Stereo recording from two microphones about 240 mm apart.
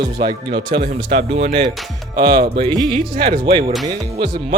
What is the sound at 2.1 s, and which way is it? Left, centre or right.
Speech, centre.